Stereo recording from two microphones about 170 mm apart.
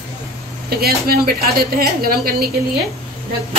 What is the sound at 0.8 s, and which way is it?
A woman's voice, 60° right (ahead or behind).